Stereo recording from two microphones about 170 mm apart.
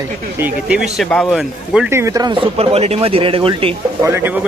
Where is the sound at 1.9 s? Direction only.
15° right (ahead or behind); by 3.8 s 35° right (ahead or behind).